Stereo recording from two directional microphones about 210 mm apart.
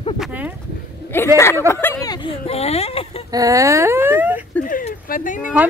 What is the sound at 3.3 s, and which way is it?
A woman's voice, 15° right (ahead or behind).